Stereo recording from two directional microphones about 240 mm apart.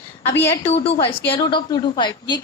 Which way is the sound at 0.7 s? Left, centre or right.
Left.